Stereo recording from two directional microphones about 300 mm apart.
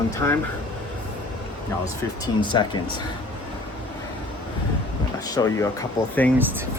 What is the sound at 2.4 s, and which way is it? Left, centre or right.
Speech, centre.